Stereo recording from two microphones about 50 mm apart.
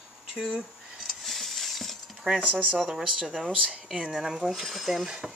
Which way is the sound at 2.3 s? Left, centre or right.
Right.